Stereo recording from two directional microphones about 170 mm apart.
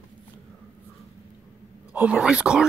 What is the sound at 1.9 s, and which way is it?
Speech, 10° right (ahead or behind).